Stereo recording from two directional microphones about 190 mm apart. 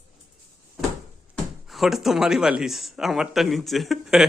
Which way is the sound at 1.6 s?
Centre (ahead or behind).